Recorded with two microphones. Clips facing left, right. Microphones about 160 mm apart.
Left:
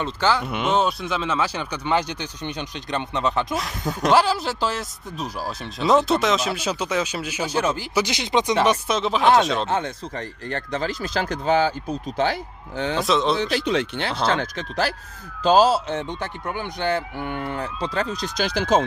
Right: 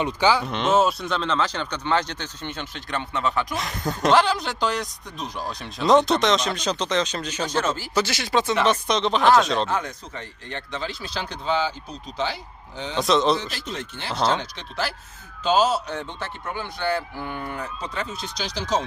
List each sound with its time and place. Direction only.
0.0 s speech: 10° right (ahead or behind)
0.4 s speech: 10° left (ahead or behind)
3.5 s speech: centre (ahead or behind); by 8.5 s 20° left (ahead or behind)
8.6 s speech: 5° left (ahead or behind)
9.6 s a man's voice: 25° left (ahead or behind)
10.2 s speech: 40° left (ahead or behind); by 13.0 s 60° left (ahead or behind)
13.0 s speech: centre (ahead or behind)
13.4 s speech: 70° left (ahead or behind)
14.3 s speech: 50° left (ahead or behind)
15.4 s a man's voice: 35° left (ahead or behind)
18.1 s speech: 40° left (ahead or behind)
18.4 s speech: 55° left (ahead or behind)